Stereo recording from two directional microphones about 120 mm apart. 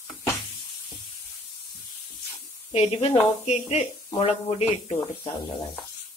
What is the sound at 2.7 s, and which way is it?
A woman's voice, 55° left (ahead or behind).